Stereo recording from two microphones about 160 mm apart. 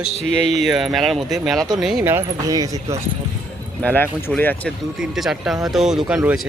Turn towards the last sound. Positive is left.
turn(degrees=-5)  # may be behind; listen again after turning